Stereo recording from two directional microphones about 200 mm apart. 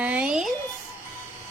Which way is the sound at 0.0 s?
5° right (ahead or behind).